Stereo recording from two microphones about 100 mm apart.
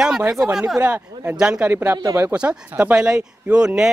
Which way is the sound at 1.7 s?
20° right (ahead or behind).